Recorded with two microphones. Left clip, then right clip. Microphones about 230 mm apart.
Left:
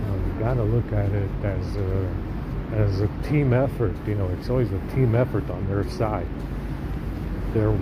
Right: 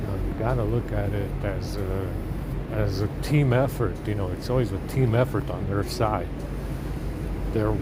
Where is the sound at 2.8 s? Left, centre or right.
Right.